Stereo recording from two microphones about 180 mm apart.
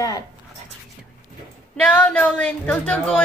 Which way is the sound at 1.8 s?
10° left (ahead or behind).